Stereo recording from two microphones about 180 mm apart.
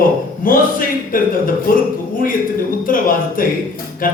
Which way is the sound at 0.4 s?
50° left (ahead or behind).